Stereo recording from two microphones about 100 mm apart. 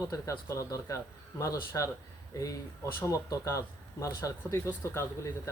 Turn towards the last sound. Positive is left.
turn(degrees=25)  # may be behind; listen again after turning